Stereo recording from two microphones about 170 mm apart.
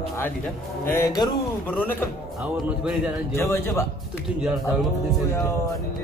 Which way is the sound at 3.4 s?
15° left (ahead or behind).